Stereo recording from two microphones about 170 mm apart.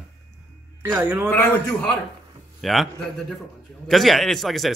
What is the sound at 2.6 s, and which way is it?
Speech, centre (ahead or behind).